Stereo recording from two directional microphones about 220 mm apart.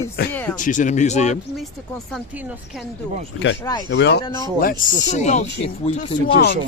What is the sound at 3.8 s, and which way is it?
Speech, 55° left (ahead or behind).